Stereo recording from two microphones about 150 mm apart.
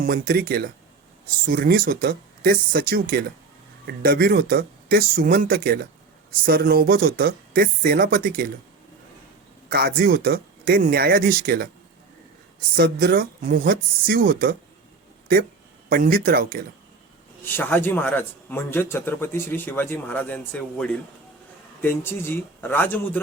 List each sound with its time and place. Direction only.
0.0 s speech: 80° right
1.5 s speech: 75° right (ahead or behind)
3.8 s speech: 90° right; by 8.4 s 70° right (ahead or behind)
9.6 s speech: 85° right
12.7 s speech: 85° right
15.9 s speech: 80° right
17.4 s a man's voice: 15° left (ahead or behind)